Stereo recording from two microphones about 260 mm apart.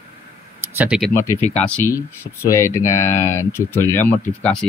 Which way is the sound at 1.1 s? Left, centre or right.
Centre.